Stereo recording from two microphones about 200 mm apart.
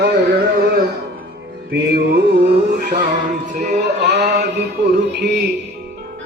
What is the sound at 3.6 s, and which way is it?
Male singing, 35° right (ahead or behind).